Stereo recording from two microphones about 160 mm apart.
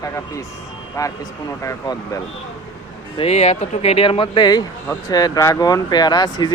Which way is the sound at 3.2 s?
45° left (ahead or behind).